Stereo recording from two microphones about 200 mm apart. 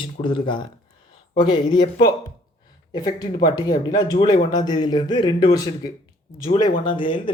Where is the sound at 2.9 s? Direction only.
20° left (ahead or behind).